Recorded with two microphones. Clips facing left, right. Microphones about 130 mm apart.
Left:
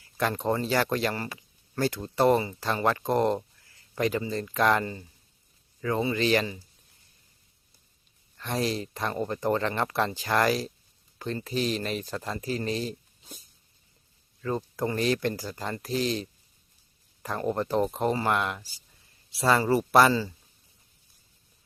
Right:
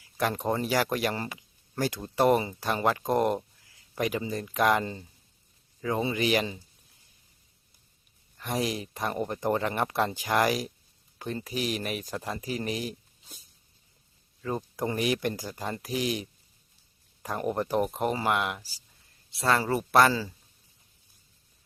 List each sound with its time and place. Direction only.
0.2 s speech: 10° right (ahead or behind)
8.4 s speech: 15° right (ahead or behind)
14.4 s speech: 15° right (ahead or behind)